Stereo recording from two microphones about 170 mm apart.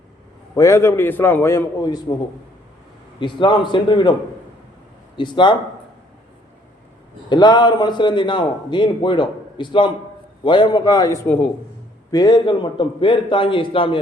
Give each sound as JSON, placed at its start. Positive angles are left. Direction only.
{"t": 0.5, "sound": "a man's voice", "side_deg": 15}
{"t": 3.2, "sound": "a man's voice", "side_deg": 30}
{"t": 5.1, "sound": "a man's voice", "side_deg": 30}
{"t": 7.3, "sound": "a man's voice", "side_deg": 25}
{"t": 12.1, "sound": "a man's voice", "side_deg": 25}